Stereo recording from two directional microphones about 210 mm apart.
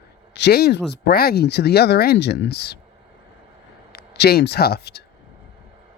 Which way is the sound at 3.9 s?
50° left (ahead or behind).